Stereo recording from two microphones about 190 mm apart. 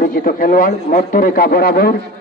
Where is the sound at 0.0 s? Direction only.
50° left (ahead or behind).